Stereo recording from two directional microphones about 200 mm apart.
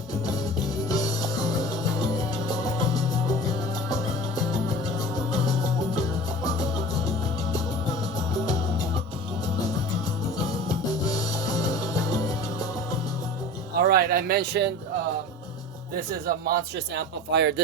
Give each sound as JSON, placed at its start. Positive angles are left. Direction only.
{"t": 0.9, "sound": "music", "side_deg": 20}
{"t": 10.7, "sound": "music", "side_deg": 15}
{"t": 13.8, "sound": "speech", "side_deg": -50}
{"t": 16.2, "sound": "a man's voice", "side_deg": -55}